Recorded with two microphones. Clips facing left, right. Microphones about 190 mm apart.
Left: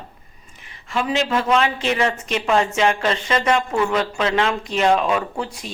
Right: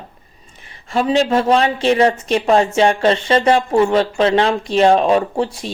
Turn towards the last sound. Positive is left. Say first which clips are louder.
# right 7 dB
turn(degrees=-30)  # may be behind; listen again after turning